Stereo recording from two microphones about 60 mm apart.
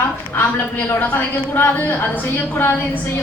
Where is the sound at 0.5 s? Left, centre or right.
Left.